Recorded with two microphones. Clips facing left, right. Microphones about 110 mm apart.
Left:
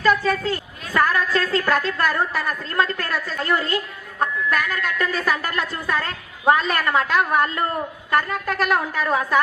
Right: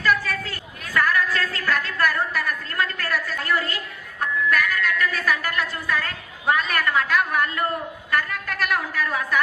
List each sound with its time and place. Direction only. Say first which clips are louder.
0.0 s a woman's voice: left 4 dB; 25° left (ahead or behind)